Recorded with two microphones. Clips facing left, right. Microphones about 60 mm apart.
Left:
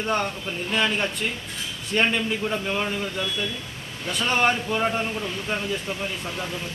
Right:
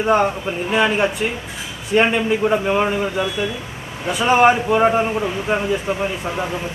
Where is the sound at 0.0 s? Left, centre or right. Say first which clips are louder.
Right 9 dB; centre.